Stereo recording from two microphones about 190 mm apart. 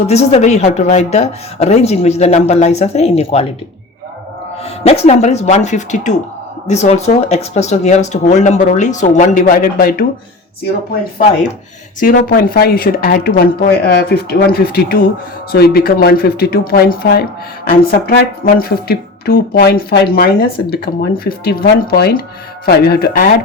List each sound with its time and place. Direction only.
0.1 s speech: 35° left (ahead or behind)
4.8 s speech: 35° left (ahead or behind); by 10.1 s 50° left (ahead or behind)
11.9 s speech: 45° left (ahead or behind)